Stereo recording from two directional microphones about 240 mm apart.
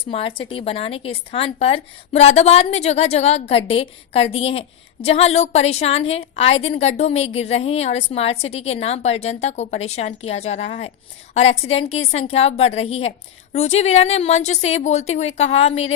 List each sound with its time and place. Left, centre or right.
0.0 s a woman's voice: left